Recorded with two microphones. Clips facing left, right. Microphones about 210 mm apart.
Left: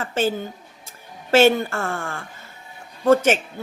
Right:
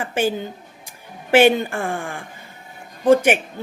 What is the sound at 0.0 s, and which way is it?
Speech, 15° right (ahead or behind).